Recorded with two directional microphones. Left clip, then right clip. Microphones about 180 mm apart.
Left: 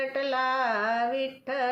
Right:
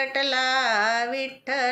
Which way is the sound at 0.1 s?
20° right (ahead or behind).